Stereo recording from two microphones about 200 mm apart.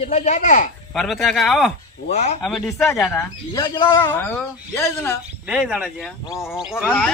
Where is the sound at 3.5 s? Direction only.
20° left (ahead or behind).